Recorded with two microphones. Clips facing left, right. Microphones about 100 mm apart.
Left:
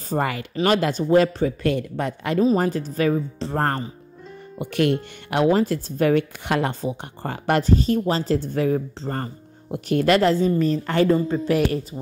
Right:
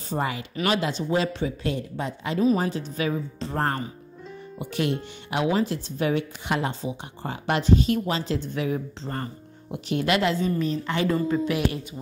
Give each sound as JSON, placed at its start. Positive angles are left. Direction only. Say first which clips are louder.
{"t": 0.1, "sound": "speech", "louder": "left 4 dB", "side_deg": 55}
{"t": 2.5, "sound": "speech", "louder": "left 4 dB", "side_deg": 50}
{"t": 4.6, "sound": "speech", "louder": "left 6 dB", "side_deg": 60}
{"t": 5.3, "sound": "speech", "louder": "left 5 dB", "side_deg": 50}
{"t": 11.1, "sound": "speech", "louder": "left 2 dB", "side_deg": 30}